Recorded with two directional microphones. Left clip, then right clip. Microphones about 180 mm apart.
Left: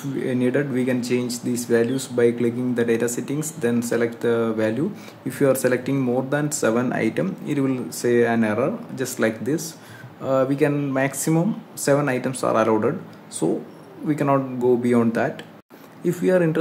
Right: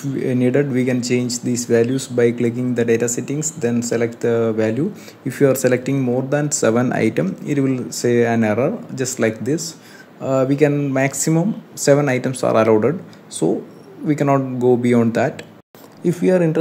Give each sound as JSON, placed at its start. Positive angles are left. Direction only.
{"t": 0.1, "sound": "speech", "side_deg": -15}